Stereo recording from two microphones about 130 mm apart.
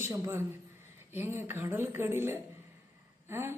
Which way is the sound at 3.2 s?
20° right (ahead or behind).